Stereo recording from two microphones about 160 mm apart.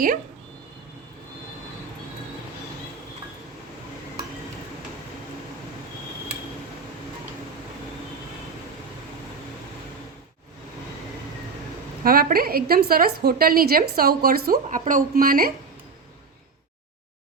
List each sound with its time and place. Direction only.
12.0 s a woman's voice: 65° right (ahead or behind)